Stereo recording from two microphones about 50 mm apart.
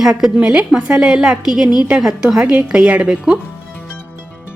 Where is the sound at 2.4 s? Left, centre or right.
Right.